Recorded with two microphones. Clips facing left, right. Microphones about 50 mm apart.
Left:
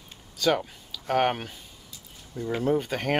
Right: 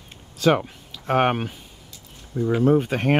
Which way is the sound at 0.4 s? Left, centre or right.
Right.